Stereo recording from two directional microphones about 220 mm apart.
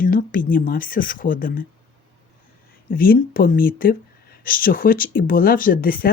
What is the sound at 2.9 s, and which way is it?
Speech, 40° left (ahead or behind).